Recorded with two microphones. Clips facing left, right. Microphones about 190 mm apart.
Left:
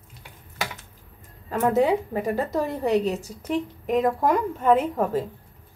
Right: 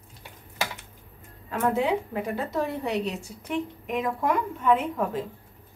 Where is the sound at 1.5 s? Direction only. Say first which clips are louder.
Left 4 dB; 40° left (ahead or behind).